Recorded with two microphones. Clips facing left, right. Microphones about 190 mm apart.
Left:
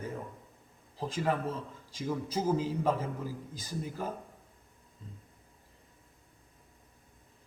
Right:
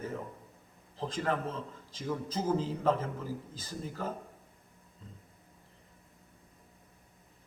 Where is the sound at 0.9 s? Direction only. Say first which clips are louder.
Left 1 dB; 10° left (ahead or behind).